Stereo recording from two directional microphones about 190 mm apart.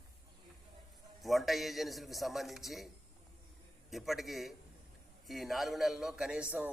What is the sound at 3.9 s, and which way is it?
A man's voice, centre (ahead or behind).